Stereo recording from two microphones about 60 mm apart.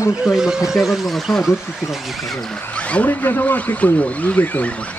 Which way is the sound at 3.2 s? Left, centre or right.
Left.